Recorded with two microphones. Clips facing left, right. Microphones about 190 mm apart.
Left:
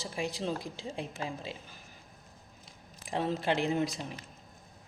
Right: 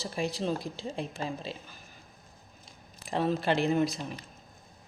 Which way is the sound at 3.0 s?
15° left (ahead or behind).